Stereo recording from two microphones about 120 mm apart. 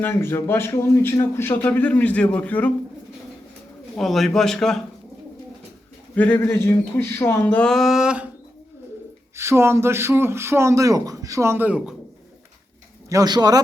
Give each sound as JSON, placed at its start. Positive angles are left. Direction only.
{"t": 0.0, "sound": "speech", "side_deg": 20}
{"t": 3.9, "sound": "a man's voice", "side_deg": 0}
{"t": 6.1, "sound": "speech", "side_deg": 15}
{"t": 9.3, "sound": "speech", "side_deg": -25}
{"t": 13.1, "sound": "speech", "side_deg": -30}